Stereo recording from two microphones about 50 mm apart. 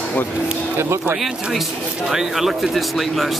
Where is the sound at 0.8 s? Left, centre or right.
Right.